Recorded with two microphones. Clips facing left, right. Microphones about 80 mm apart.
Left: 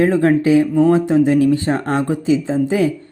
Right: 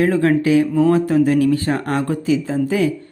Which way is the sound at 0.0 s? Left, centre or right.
Left.